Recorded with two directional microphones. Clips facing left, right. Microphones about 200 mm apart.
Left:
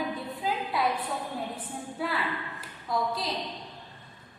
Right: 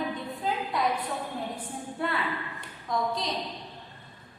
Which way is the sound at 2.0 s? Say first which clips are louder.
Right 1 dB; centre (ahead or behind).